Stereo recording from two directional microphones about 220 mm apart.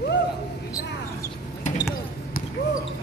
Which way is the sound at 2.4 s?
40° left (ahead or behind).